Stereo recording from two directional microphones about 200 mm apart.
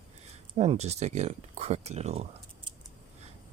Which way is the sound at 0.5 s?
35° right (ahead or behind).